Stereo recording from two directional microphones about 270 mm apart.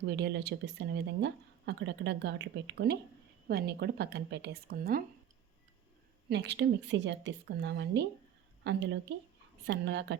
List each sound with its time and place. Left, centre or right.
0.0 s speech: right
6.2 s speech: right